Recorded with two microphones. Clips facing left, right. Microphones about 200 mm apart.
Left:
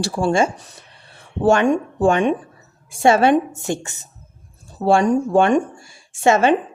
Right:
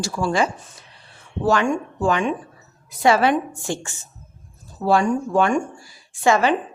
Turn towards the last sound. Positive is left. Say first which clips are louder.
# left 3 dB
turn(degrees=25)  # may be behind; listen again after turning